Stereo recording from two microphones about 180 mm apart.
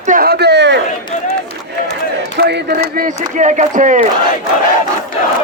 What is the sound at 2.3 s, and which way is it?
Speech, 70° right (ahead or behind).